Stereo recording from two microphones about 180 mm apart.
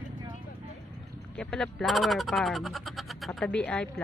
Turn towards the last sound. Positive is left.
turn(degrees=5)  # may be behind; listen again after turning